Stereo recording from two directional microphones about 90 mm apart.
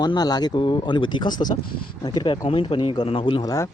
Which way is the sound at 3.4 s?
40° left (ahead or behind).